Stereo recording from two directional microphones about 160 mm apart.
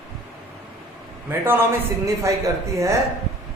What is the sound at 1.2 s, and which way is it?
Speech, 15° right (ahead or behind).